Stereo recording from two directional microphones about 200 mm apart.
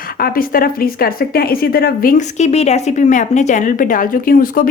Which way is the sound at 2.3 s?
35° left (ahead or behind).